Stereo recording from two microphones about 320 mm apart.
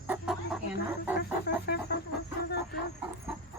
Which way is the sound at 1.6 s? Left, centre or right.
Left.